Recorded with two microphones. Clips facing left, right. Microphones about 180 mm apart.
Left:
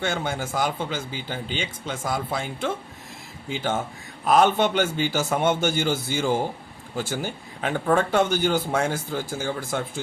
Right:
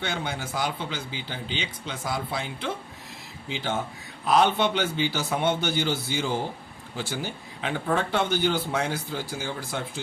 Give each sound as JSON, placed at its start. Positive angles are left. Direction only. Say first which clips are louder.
{"t": 0.0, "sound": "speech", "louder": "left 4 dB", "side_deg": 45}